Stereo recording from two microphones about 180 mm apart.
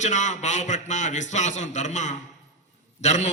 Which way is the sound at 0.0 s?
40° left (ahead or behind).